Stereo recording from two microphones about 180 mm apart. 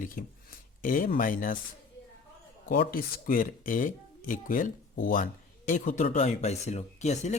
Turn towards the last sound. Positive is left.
turn(degrees=40)  # may be behind; listen again after turning